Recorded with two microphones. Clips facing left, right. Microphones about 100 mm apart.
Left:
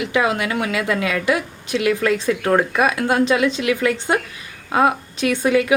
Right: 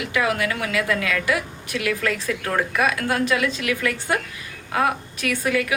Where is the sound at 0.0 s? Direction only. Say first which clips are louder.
Left 3 dB; 25° left (ahead or behind).